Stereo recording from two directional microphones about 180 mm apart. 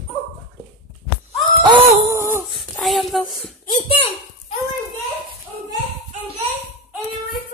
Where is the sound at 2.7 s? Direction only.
Centre (ahead or behind).